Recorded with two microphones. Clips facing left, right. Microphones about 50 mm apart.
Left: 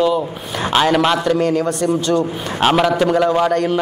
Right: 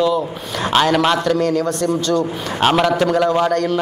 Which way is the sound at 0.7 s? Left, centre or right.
Centre.